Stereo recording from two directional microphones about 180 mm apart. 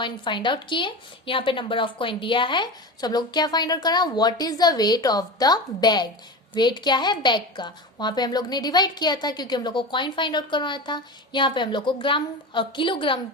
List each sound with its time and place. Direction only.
0.0 s a woman's voice: 25° left (ahead or behind)